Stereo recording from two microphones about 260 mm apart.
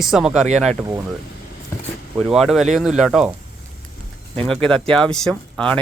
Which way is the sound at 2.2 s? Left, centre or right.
Centre.